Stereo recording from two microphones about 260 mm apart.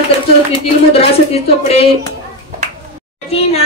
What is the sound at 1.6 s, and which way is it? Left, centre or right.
Speech, left.